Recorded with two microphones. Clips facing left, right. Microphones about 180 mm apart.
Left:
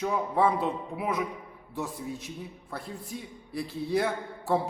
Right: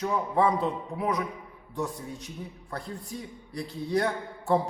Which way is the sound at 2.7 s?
5° left (ahead or behind).